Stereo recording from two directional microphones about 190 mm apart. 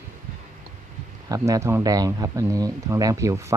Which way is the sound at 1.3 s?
15° right (ahead or behind).